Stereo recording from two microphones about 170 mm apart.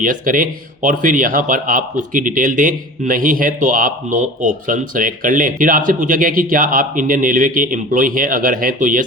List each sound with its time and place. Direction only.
0.0 s speech: 50° right (ahead or behind)